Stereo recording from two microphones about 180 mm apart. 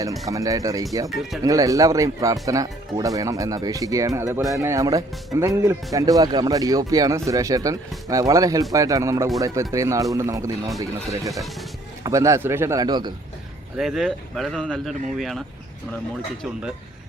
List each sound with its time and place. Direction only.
0.3 s speech: 20° right (ahead or behind)
1.1 s speech: centre (ahead or behind)
1.5 s speech: 20° right (ahead or behind)
13.7 s speech: centre (ahead or behind)